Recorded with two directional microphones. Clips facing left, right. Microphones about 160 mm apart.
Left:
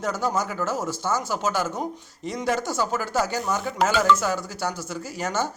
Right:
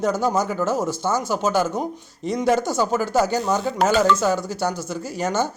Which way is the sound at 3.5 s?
30° right (ahead or behind).